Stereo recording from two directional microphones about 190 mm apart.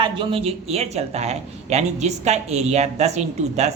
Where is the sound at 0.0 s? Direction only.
30° right (ahead or behind).